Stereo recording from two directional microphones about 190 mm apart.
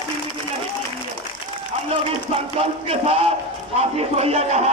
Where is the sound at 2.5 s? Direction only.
30° right (ahead or behind).